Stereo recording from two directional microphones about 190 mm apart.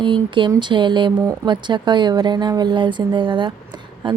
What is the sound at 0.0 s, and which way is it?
Speech, 25° right (ahead or behind).